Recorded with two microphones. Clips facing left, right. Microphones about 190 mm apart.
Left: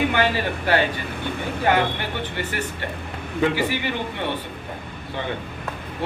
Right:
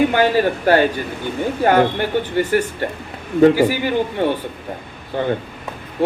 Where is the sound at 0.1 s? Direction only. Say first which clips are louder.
Right 6 dB; 45° right (ahead or behind).